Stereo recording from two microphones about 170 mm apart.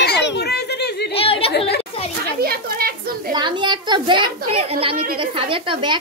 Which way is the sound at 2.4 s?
60° right (ahead or behind).